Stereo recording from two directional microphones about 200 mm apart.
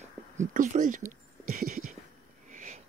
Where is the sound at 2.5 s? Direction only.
40° right (ahead or behind).